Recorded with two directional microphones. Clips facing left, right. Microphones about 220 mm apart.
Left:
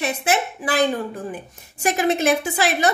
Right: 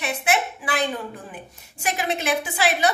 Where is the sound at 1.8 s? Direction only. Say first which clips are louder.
Left 7 dB; 45° left (ahead or behind).